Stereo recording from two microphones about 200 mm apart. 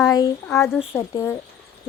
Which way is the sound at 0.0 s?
20° left (ahead or behind).